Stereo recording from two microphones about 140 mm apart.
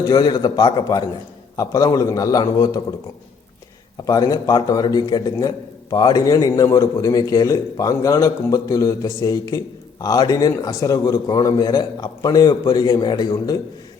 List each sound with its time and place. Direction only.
0.0 s a man's voice: 30° left (ahead or behind)
4.0 s a man's voice: 25° left (ahead or behind)